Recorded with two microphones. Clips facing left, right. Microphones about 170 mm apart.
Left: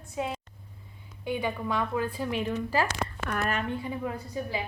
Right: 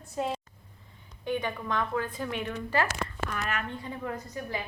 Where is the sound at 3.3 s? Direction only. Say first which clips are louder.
Left 4 dB; 65° left (ahead or behind).